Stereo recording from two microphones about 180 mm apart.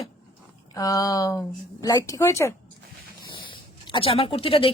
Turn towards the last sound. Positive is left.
turn(degrees=30)  # may be behind; listen again after turning